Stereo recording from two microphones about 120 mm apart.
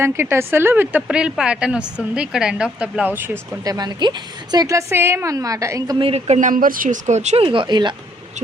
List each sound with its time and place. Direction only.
0.0 s a woman's voice: 20° right (ahead or behind)
1.0 s a woman's voice: 5° right (ahead or behind)
3.6 s a woman's voice: 35° right (ahead or behind)
6.0 s speech: 55° right (ahead or behind)
7.4 s speech: 45° right (ahead or behind)